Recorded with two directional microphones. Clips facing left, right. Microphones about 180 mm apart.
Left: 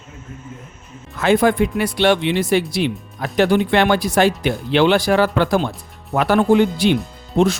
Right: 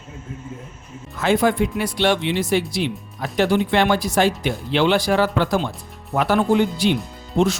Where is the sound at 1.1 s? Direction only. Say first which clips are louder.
Left 3 dB; 60° left (ahead or behind).